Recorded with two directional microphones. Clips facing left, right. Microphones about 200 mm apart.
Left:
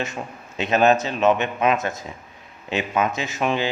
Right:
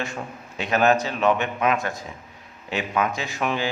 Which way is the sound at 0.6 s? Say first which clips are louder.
Left 2 dB; 20° left (ahead or behind).